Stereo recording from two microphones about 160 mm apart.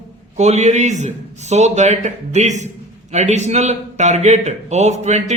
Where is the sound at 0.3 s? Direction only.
45° right (ahead or behind).